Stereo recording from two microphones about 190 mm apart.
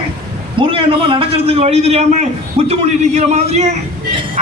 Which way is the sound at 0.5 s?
30° right (ahead or behind).